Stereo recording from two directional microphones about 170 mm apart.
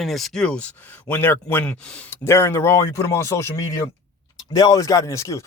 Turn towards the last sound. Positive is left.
turn(degrees=20)  # may be behind; listen again after turning